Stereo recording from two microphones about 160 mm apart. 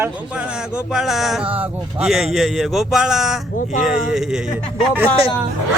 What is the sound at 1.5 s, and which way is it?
Speech, 35° right (ahead or behind).